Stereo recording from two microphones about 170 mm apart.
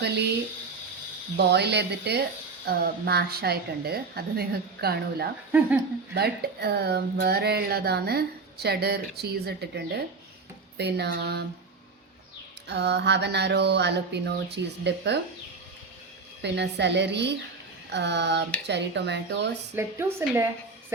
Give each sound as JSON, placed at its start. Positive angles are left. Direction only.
{"t": 1.4, "sound": "speech", "side_deg": -80}
{"t": 2.6, "sound": "speech", "side_deg": -65}
{"t": 5.5, "sound": "a woman's voice", "side_deg": -10}
{"t": 6.1, "sound": "speech", "side_deg": -70}
{"t": 12.6, "sound": "a sound", "side_deg": -80}
{"t": 16.4, "sound": "a woman's voice", "side_deg": -90}
{"t": 19.7, "sound": "a woman's voice", "side_deg": -15}